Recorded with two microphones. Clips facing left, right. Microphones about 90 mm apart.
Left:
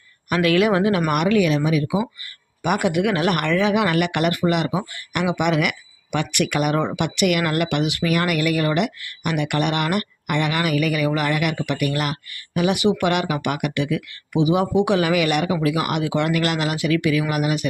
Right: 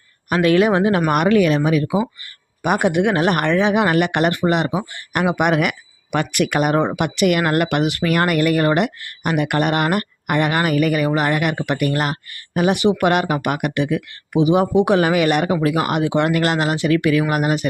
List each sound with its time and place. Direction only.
0.3 s speech: 30° right (ahead or behind)